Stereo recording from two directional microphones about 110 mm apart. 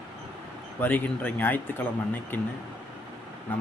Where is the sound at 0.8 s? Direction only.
15° left (ahead or behind).